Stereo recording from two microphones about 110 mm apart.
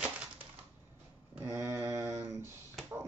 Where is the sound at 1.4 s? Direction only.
30° right (ahead or behind).